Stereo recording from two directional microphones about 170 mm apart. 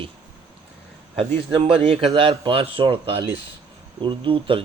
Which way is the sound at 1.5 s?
35° right (ahead or behind).